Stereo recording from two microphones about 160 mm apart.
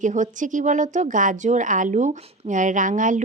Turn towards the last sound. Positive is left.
turn(degrees=-55)  # may be behind; listen again after turning